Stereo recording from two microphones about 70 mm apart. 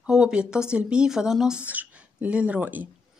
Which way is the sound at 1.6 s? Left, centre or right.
Right.